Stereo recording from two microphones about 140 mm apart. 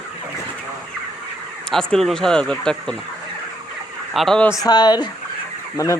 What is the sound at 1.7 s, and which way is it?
Speech, centre (ahead or behind).